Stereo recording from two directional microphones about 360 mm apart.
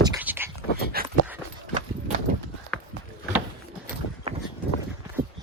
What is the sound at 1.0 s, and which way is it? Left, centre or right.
Dog, right.